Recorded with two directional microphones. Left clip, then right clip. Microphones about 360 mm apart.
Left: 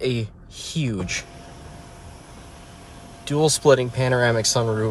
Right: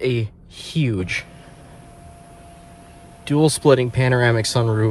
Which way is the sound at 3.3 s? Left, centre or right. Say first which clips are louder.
Right 1 dB; centre.